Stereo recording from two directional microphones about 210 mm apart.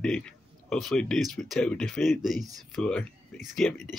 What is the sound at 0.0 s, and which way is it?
Speech, 5° left (ahead or behind).